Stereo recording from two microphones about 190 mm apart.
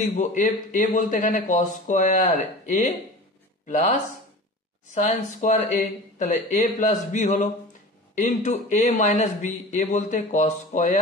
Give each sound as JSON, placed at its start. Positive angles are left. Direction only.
{"t": 0.1, "sound": "speech", "side_deg": 40}
{"t": 4.9, "sound": "speech", "side_deg": 40}